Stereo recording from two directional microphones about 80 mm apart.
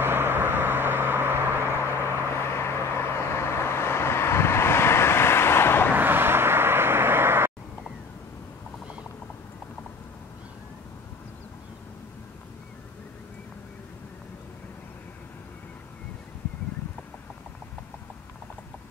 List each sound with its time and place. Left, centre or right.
0.0 s vehicle: right
2.3 s vehicle: left
5.9 s vehicle: right